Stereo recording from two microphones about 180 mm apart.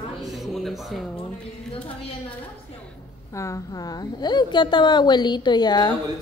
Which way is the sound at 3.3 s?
15° left (ahead or behind).